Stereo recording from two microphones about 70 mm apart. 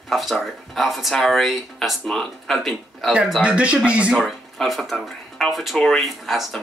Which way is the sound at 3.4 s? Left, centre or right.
Centre.